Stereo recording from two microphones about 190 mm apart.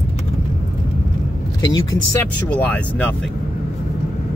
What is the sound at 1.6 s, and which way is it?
Speech, 20° left (ahead or behind).